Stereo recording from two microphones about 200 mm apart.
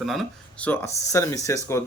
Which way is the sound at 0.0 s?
Centre (ahead or behind).